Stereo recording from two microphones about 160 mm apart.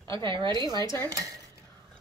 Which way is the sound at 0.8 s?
20° left (ahead or behind).